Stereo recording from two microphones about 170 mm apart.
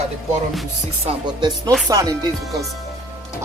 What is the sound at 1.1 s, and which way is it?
Speech, 25° right (ahead or behind).